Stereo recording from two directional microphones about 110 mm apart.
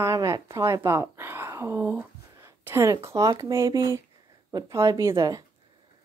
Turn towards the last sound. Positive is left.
turn(degrees=-30)  # may be behind; listen again after turning